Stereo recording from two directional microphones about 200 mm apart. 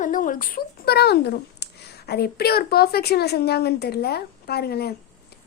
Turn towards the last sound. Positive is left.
turn(degrees=50)  # may be behind; listen again after turning